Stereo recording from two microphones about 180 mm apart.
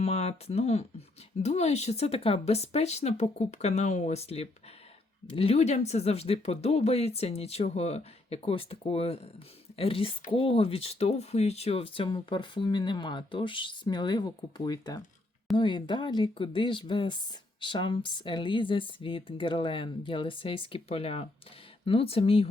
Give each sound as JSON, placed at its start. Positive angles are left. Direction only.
{"t": 0.0, "sound": "speech", "side_deg": 35}